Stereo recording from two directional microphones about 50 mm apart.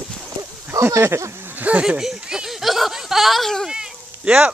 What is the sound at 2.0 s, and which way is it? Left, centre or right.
Speech, centre.